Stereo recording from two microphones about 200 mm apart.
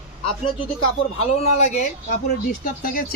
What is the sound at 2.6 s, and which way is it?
Speech, 45° left (ahead or behind).